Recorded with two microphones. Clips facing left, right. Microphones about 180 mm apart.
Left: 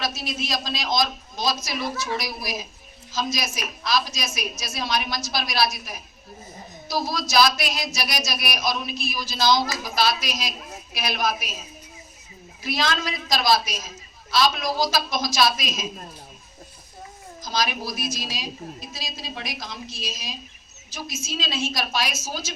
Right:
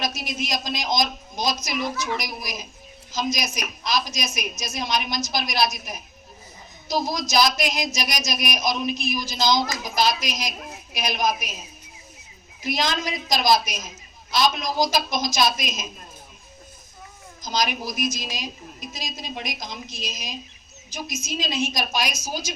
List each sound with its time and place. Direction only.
0.0 s a woman's voice: 15° right (ahead or behind)
12.6 s a man's voice: 20° right (ahead or behind)
17.4 s a woman's voice: 20° right (ahead or behind)